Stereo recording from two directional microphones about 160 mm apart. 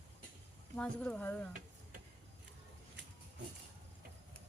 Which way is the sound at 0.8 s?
5° left (ahead or behind).